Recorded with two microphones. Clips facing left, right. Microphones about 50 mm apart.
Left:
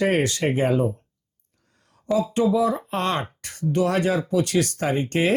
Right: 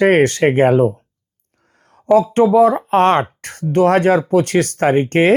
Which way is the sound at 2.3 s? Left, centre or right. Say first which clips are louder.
Right 9 dB; right.